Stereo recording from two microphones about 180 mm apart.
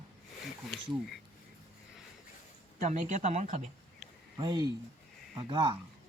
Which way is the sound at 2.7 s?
45° right (ahead or behind).